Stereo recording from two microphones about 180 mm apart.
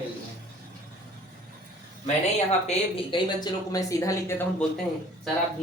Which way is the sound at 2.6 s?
25° left (ahead or behind).